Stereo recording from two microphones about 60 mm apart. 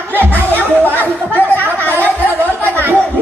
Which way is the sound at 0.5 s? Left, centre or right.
Right.